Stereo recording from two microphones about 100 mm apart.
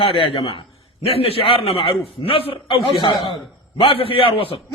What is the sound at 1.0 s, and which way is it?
A man's voice, 85° left.